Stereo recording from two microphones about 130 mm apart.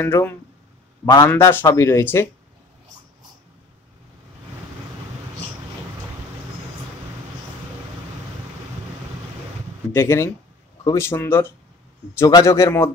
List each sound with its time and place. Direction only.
0.0 s speech: 15° left (ahead or behind)
1.0 s speech: 30° left (ahead or behind)
1.3 s speech: 15° left (ahead or behind)
9.8 s speech: 20° left (ahead or behind)